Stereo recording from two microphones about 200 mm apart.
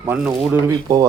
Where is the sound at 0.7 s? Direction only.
20° right (ahead or behind).